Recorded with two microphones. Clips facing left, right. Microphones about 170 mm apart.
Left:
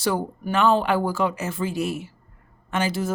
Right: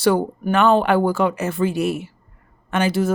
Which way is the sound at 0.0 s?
65° right (ahead or behind).